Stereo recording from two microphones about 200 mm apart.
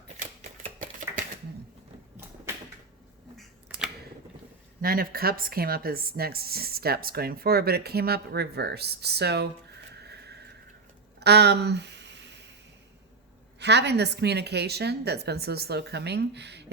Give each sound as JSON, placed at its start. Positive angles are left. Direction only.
{"t": 4.8, "sound": "speech", "side_deg": -45}
{"t": 10.0, "sound": "a sound", "side_deg": -55}
{"t": 13.6, "sound": "a woman's voice", "side_deg": -60}